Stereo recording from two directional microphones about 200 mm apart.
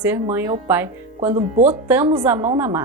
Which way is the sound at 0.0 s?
10° right (ahead or behind).